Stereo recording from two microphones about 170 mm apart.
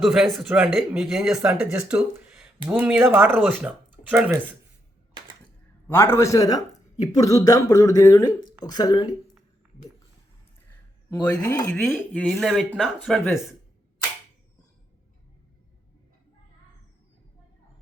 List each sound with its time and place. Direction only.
0.0 s speech: centre (ahead or behind)
5.9 s a man's voice: 15° left (ahead or behind)
10.7 s speech: 10° left (ahead or behind)